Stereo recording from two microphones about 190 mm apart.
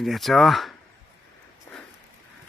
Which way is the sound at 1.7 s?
15° left (ahead or behind).